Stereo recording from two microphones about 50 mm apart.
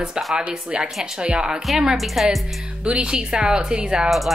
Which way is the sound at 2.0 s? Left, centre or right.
Centre.